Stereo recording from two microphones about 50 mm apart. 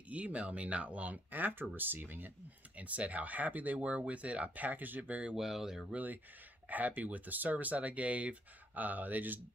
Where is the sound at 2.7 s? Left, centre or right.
Right.